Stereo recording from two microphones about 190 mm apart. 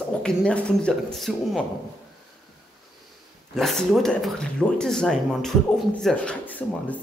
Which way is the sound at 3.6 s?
Centre (ahead or behind).